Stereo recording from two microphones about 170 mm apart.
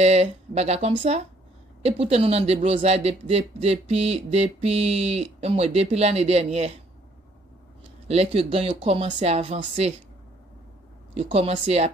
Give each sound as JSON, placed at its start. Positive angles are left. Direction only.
{"t": 0.0, "sound": "speech", "side_deg": -40}
{"t": 8.1, "sound": "speech", "side_deg": -35}
{"t": 11.1, "sound": "speech", "side_deg": -35}